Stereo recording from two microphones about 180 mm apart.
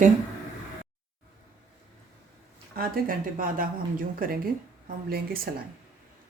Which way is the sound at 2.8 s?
50° right (ahead or behind).